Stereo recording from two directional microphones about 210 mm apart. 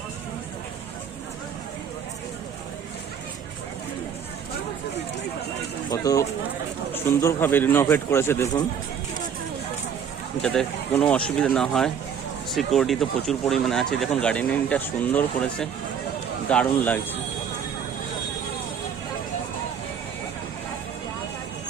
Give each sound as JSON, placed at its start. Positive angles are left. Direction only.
{"t": 5.9, "sound": "speech", "side_deg": 15}
{"t": 10.4, "sound": "speech", "side_deg": 5}